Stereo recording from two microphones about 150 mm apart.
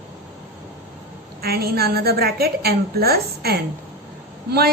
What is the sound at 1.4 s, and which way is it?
A woman's voice, 90° right.